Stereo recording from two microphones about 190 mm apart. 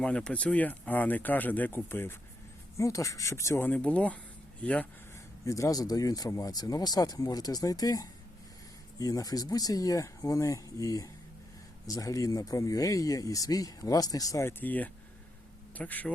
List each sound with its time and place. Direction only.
0.0 s speech: 5° left (ahead or behind)
5.5 s speech: 15° left (ahead or behind)